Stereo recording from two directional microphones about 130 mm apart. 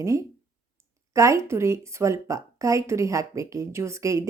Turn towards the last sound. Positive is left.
turn(degrees=-25)  # may be behind; listen again after turning